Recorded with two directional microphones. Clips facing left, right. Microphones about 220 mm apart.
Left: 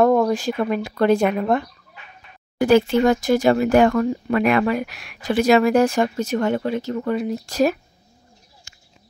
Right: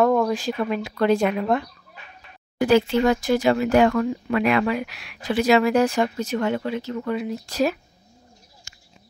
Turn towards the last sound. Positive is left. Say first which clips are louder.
# left 3 dB
turn(degrees=45)  # may be behind; listen again after turning